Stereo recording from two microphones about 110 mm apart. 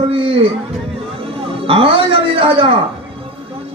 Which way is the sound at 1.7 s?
55° right (ahead or behind).